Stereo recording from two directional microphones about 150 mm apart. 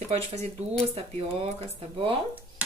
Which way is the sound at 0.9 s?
40° right (ahead or behind).